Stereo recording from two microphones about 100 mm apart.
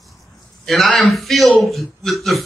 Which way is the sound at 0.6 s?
Centre (ahead or behind).